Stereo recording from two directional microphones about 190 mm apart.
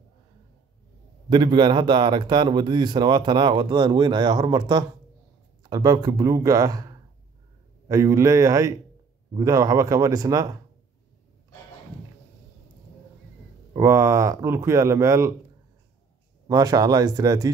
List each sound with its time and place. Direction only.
1.3 s speech: 25° right (ahead or behind)
7.9 s speech: 15° right (ahead or behind)
13.7 s speech: 15° right (ahead or behind)
16.4 s speech: 20° right (ahead or behind)